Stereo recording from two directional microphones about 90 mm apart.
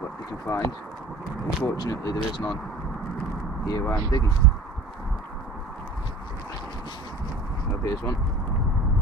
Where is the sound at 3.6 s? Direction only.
45° left (ahead or behind).